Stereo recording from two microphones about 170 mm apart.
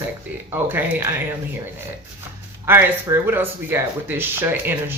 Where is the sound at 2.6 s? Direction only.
15° right (ahead or behind).